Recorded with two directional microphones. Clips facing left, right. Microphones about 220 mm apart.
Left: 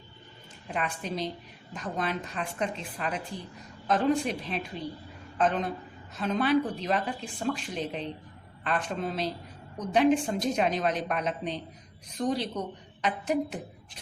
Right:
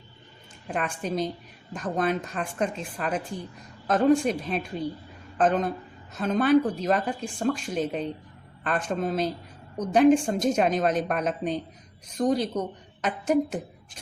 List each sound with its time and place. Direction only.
0.7 s speech: 45° right (ahead or behind)